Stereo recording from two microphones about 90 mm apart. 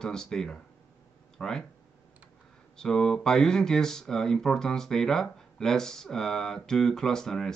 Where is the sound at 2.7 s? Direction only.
5° left (ahead or behind).